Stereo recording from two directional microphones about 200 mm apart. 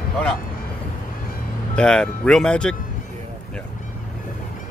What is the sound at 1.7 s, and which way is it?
Speech, 5° left (ahead or behind).